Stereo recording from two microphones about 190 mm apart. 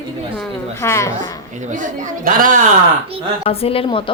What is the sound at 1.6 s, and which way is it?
A woman's voice, 40° right (ahead or behind).